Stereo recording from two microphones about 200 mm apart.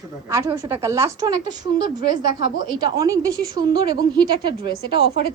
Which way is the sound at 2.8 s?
20° right (ahead or behind).